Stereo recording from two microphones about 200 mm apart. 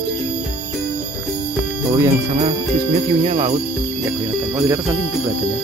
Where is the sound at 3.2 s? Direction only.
35° right (ahead or behind).